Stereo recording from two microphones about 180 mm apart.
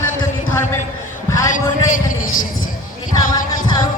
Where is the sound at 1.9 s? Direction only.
50° left (ahead or behind).